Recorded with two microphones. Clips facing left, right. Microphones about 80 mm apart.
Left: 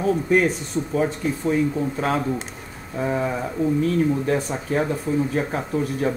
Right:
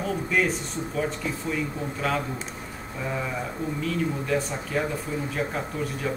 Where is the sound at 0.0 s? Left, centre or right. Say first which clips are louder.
Left 6 dB; left.